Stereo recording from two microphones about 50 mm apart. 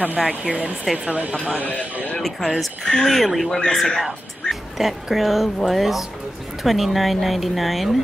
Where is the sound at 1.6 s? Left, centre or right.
Left.